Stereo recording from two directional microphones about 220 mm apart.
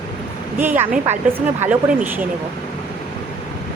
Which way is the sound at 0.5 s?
10° right (ahead or behind).